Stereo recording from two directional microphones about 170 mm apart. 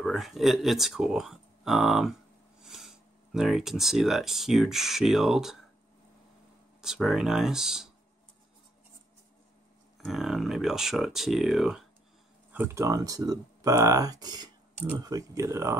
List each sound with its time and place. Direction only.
0.0 s speech: centre (ahead or behind)
2.6 s a sound: centre (ahead or behind)
3.3 s speech: centre (ahead or behind)
6.8 s speech: 5° right (ahead or behind)
10.0 s speech: centre (ahead or behind)
12.5 s speech: 15° right (ahead or behind)